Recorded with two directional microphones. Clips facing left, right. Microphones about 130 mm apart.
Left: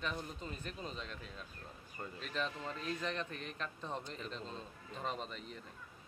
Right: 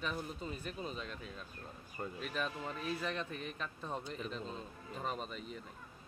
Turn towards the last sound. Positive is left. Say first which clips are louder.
# right 1 dB
turn(degrees=-5)  # may be behind; listen again after turning